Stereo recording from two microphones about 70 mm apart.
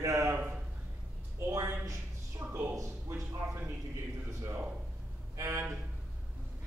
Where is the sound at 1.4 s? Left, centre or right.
Right.